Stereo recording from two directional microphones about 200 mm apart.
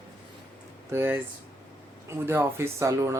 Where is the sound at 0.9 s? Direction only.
10° right (ahead or behind).